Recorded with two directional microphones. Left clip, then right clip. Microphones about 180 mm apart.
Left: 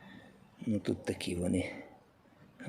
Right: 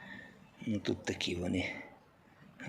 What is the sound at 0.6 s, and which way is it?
Speech, 40° left (ahead or behind).